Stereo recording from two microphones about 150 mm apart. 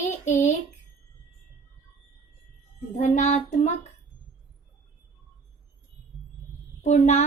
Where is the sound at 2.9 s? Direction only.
50° left (ahead or behind).